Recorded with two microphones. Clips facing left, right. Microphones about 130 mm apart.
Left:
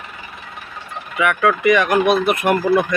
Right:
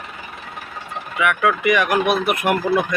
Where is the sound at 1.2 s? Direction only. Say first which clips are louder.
Left 2 dB; 5° right (ahead or behind).